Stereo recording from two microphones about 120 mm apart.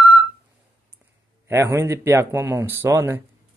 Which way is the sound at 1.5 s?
20° right (ahead or behind).